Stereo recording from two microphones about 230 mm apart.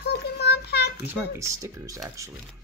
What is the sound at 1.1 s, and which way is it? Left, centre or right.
Speech, centre.